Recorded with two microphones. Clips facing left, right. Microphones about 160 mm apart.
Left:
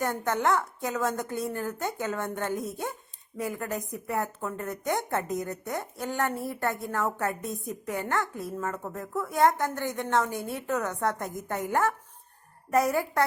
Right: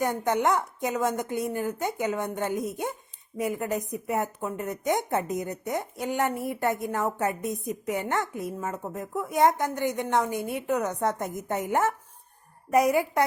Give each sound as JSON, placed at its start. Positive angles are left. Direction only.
{"t": 0.0, "sound": "a woman's voice", "side_deg": -15}